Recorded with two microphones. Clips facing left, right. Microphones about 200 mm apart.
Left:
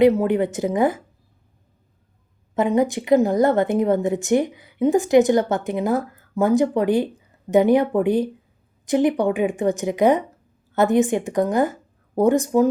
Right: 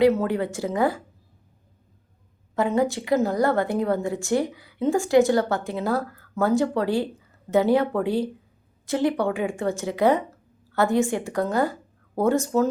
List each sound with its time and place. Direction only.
0.2 s a woman's voice: 20° left (ahead or behind)
2.6 s a woman's voice: 20° left (ahead or behind)